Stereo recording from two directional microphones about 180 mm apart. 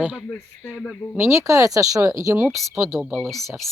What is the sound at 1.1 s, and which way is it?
Speech, 15° right (ahead or behind).